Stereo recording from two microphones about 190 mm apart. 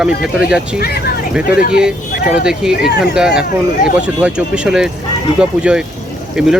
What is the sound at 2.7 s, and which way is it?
Speech, 55° left (ahead or behind).